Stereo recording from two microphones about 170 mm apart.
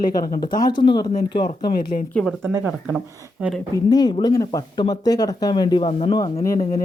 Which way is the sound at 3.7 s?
25° left (ahead or behind).